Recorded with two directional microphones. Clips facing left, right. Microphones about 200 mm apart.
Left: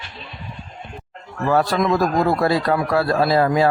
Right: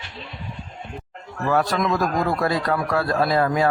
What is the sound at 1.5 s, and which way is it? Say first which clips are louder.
A man's voice: left 3 dB; 30° left (ahead or behind).